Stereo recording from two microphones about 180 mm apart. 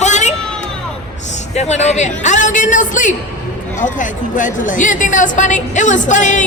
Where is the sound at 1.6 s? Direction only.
40° left (ahead or behind).